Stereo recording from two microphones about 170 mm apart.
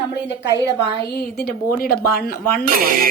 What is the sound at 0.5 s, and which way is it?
Speech, 20° right (ahead or behind).